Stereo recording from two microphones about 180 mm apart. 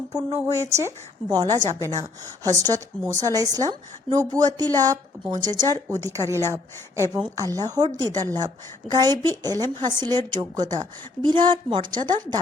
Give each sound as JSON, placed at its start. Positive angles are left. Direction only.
{"t": 0.1, "sound": "a woman's voice", "side_deg": -20}